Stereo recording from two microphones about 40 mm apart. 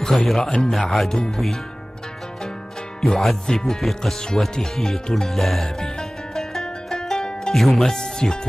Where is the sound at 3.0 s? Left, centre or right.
Centre.